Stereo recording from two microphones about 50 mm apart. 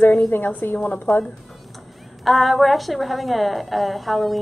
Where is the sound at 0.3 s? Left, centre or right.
Left.